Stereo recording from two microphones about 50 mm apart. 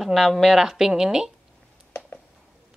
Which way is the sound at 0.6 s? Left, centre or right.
Centre.